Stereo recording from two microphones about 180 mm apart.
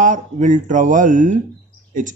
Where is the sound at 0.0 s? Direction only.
45° right (ahead or behind).